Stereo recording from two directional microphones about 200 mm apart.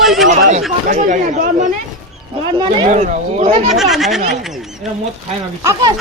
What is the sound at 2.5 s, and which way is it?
Speech, 25° right (ahead or behind).